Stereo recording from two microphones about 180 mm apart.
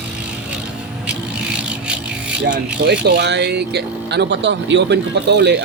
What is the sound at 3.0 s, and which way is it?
Speech, 65° right (ahead or behind).